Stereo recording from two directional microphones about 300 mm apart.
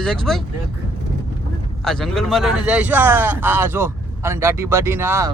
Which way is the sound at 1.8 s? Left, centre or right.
Centre.